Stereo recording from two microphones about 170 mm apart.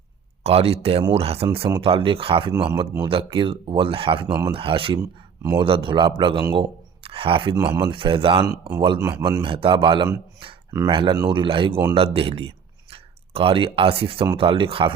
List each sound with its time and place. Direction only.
0.4 s speech: 35° right (ahead or behind)
5.4 s speech: 20° right (ahead or behind)
5.6 s speech: 30° right (ahead or behind)